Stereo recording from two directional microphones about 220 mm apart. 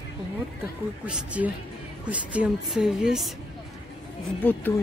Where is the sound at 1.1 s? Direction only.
5° right (ahead or behind).